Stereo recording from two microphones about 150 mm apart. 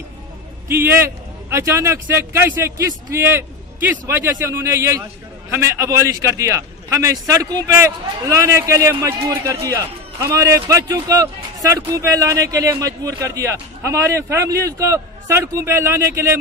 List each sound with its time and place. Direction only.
0.7 s a man's voice: 15° right (ahead or behind)